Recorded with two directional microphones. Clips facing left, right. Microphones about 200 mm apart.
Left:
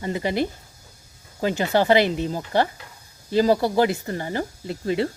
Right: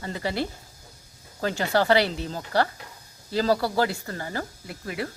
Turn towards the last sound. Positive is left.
turn(degrees=25)  # may be behind; listen again after turning